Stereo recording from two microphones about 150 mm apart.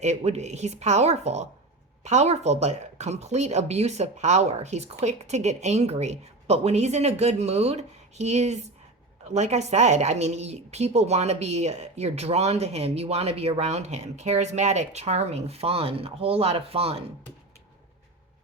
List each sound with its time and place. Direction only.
0.0 s speech: 50° right (ahead or behind)